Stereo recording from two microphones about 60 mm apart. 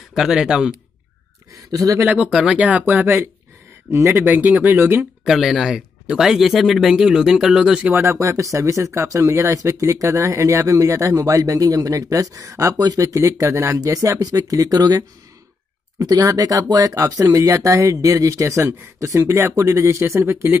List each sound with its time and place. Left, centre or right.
0.1 s speech: centre
1.7 s speech: right
2.5 s speech: right
2.9 s speech: right
5.2 s speech: centre
8.0 s speech: right
13.7 s speech: right
18.6 s speech: right
20.2 s speech: right